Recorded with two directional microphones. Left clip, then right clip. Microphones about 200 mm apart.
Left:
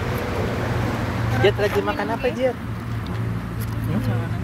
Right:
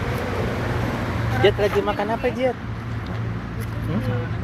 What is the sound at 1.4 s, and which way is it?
Speech, 25° right (ahead or behind).